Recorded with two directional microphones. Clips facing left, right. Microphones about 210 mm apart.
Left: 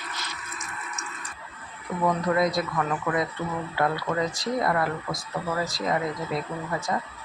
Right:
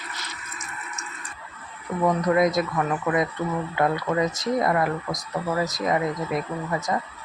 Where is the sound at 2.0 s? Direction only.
20° right (ahead or behind).